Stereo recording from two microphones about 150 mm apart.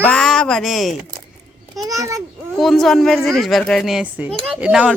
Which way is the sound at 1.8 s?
20° right (ahead or behind).